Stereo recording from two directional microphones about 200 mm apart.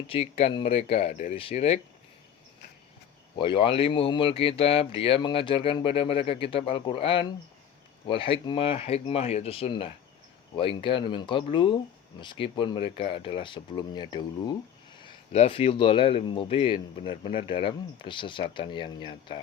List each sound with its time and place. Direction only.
0.1 s speech: 30° left (ahead or behind)
3.3 s speech: 25° left (ahead or behind)